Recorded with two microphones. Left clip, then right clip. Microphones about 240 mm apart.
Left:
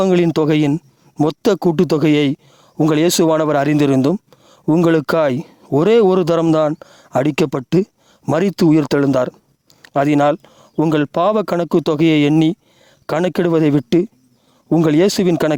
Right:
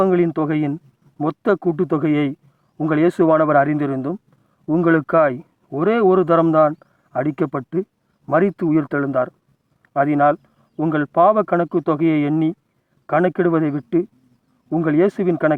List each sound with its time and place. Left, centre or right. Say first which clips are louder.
0.0 s speech: left 3 dB; left